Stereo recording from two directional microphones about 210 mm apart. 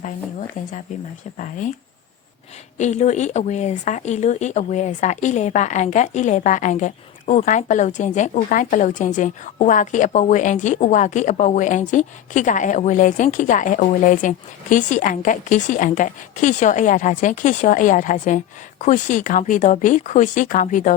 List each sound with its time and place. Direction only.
0.0 s speech: 40° left (ahead or behind)
2.7 s speech: 35° left (ahead or behind)